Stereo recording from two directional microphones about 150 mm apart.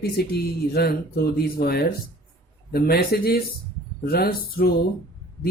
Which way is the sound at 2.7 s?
85° left.